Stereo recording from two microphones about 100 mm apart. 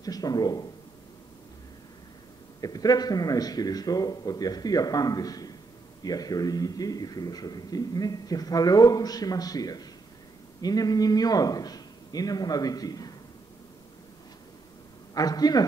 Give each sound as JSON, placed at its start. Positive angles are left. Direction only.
{"t": 0.0, "sound": "speech", "side_deg": 40}
{"t": 2.6, "sound": "a man's voice", "side_deg": 40}
{"t": 15.1, "sound": "a man's voice", "side_deg": 40}